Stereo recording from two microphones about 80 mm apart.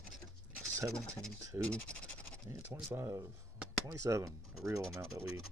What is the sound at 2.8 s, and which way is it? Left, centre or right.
Speech, right.